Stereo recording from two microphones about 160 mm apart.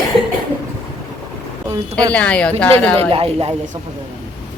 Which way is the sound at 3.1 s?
35° right (ahead or behind).